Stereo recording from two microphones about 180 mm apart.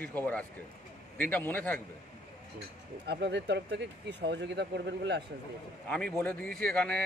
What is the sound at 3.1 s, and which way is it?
Speech, 75° right (ahead or behind).